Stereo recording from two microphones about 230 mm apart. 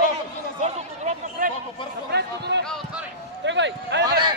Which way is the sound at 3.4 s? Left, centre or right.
Right.